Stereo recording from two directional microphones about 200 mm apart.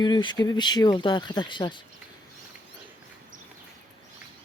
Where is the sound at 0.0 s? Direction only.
20° left (ahead or behind).